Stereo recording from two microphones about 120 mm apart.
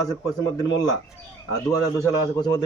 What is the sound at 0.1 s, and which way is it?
Speech, 30° left (ahead or behind).